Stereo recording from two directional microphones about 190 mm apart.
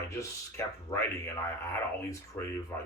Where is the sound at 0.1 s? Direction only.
15° left (ahead or behind).